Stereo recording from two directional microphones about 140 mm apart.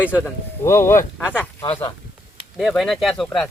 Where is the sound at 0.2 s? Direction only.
20° left (ahead or behind).